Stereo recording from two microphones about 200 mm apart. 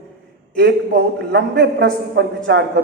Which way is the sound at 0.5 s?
55° right (ahead or behind).